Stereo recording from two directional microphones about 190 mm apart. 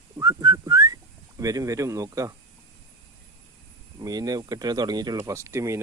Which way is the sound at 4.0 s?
20° right (ahead or behind).